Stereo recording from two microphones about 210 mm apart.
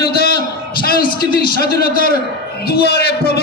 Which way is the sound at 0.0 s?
50° left (ahead or behind).